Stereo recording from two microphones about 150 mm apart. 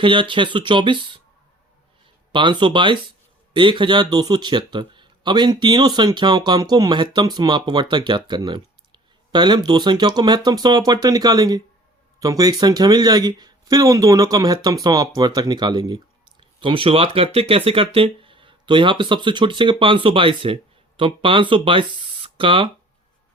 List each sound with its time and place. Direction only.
0.0 s speech: 35° right (ahead or behind)
2.3 s speech: 30° right (ahead or behind)